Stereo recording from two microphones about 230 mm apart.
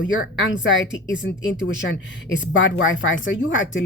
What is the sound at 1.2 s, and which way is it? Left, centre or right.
A woman's voice, left.